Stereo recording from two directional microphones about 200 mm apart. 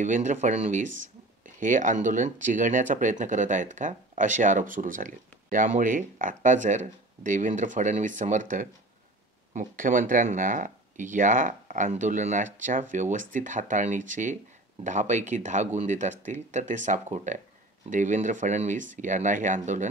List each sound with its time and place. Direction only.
0.0 s speech: 40° right (ahead or behind)